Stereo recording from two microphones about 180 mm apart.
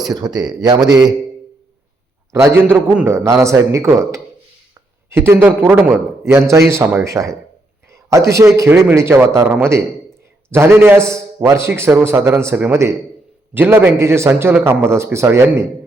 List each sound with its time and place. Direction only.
0.0 s a man's voice: 20° right (ahead or behind)
2.3 s a man's voice: 15° right (ahead or behind)